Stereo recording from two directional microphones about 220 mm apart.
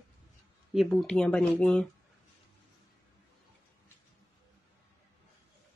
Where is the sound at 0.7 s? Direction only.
Centre (ahead or behind).